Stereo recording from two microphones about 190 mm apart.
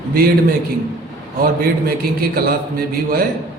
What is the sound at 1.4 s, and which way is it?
A man's voice, 50° right (ahead or behind).